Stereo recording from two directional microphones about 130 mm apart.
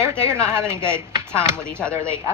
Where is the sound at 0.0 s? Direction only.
20° right (ahead or behind).